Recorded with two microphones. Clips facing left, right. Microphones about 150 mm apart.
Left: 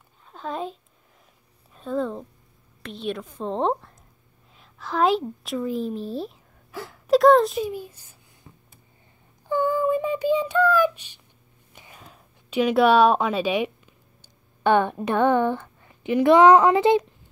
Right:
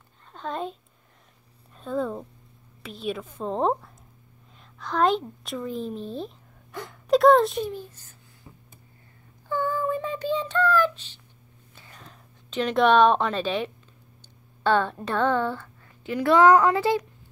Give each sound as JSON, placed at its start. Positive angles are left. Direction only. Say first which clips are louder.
{"t": 0.3, "sound": "a child's voice", "louder": "left 1 dB", "side_deg": 0}
{"t": 9.5, "sound": "speech", "louder": "left 5 dB", "side_deg": 15}
{"t": 11.7, "sound": "a sound", "louder": "left 2 dB", "side_deg": 15}